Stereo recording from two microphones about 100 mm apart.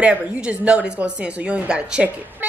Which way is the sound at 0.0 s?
10° right (ahead or behind).